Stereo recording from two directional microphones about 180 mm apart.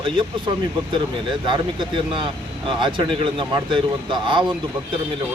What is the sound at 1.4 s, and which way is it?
Speech, 25° right (ahead or behind).